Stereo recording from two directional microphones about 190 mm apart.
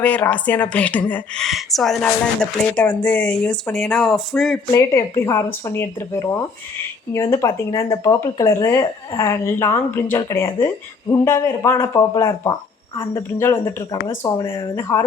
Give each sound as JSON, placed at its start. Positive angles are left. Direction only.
{"t": 0.0, "sound": "speech", "side_deg": 5}
{"t": 4.7, "sound": "a woman's voice", "side_deg": 15}